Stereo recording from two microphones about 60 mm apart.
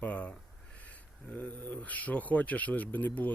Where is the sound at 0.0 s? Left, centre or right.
Left.